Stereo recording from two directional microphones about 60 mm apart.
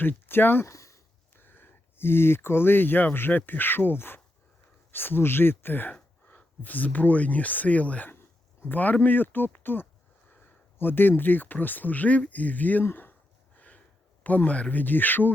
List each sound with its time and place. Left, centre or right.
0.0 s speech: left
0.7 s a sound: left
1.4 s speech: left
10.4 s a sound: left
11.2 s speech: left
13.6 s sniff: left
14.3 s speech: left